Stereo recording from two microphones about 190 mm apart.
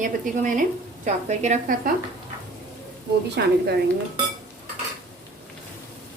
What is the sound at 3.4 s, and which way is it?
Speech, 60° right (ahead or behind).